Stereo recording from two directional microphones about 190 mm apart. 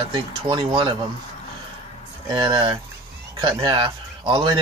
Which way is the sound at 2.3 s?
25° right (ahead or behind).